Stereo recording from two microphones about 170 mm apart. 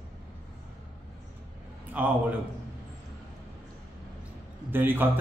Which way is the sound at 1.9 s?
10° right (ahead or behind).